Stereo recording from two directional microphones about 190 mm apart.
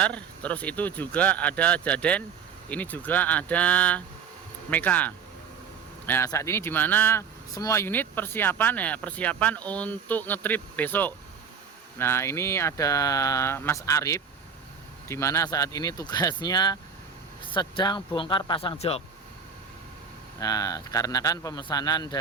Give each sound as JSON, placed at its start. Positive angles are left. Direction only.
{"t": 0.0, "sound": "a man's voice", "side_deg": 5}
{"t": 20.4, "sound": "a man's voice", "side_deg": 20}